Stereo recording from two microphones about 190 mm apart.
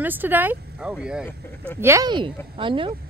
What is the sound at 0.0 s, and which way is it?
Speech, 10° right (ahead or behind).